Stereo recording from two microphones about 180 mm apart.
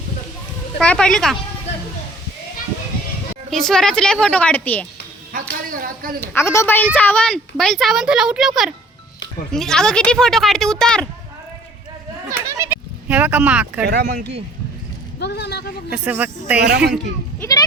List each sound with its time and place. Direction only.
0.8 s a woman's voice: 5° left (ahead or behind)
3.5 s a woman's voice: centre (ahead or behind)
5.3 s speech: 50° right (ahead or behind)
6.1 s a woman's voice: 15° left (ahead or behind)
12.5 s bleat: 10° right (ahead or behind)
13.8 s speech: 70° right (ahead or behind)
15.2 s speech: 65° left (ahead or behind)
15.9 s speech: 10° right (ahead or behind)
16.6 s speech: 65° right (ahead or behind)